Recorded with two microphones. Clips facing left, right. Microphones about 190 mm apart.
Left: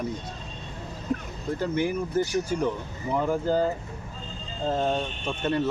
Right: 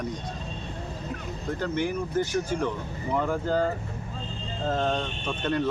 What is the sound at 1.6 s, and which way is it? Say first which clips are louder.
Speech: left 2 dB; 10° left (ahead or behind).